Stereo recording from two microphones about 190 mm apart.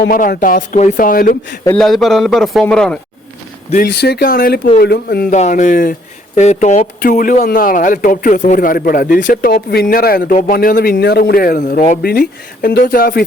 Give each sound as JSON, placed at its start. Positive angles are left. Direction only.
{"t": 0.0, "sound": "speech", "side_deg": 50}
{"t": 1.6, "sound": "a man's voice", "side_deg": 5}
{"t": 3.8, "sound": "speech", "side_deg": 60}
{"t": 5.3, "sound": "speech", "side_deg": 40}